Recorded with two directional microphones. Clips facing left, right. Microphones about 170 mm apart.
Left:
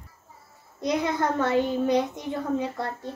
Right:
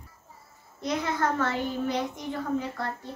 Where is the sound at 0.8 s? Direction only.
15° left (ahead or behind).